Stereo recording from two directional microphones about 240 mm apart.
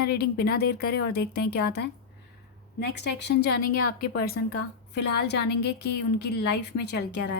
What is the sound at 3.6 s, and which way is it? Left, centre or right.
Speech, left.